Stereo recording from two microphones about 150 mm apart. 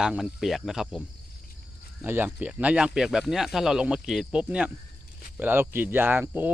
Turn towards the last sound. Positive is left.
turn(degrees=-10)  # may be behind; listen again after turning